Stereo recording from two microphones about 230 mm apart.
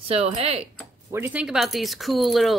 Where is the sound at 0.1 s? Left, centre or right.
Right.